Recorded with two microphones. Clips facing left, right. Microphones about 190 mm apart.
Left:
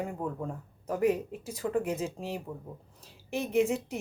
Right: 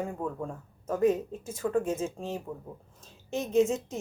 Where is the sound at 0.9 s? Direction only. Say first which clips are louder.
Right 2 dB; 15° left (ahead or behind).